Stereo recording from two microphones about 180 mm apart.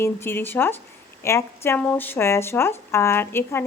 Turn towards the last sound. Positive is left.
turn(degrees=15)  # may be behind; listen again after turning